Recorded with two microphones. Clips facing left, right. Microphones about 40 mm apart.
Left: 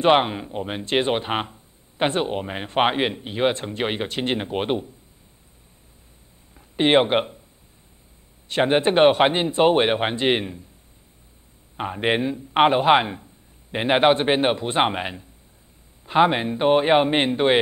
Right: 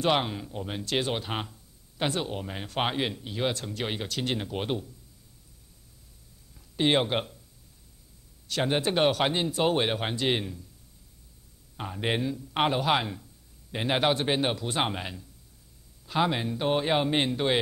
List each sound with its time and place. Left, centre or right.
0.0 s speech: left
6.5 s speech: left
8.5 s speech: left
11.7 s speech: left